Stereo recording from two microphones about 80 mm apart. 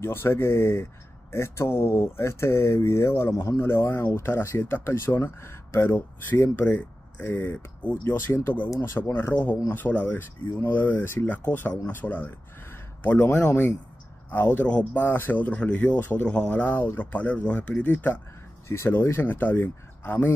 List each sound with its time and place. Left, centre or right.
0.0 s speech: left
9.3 s speech: left
18.7 s speech: left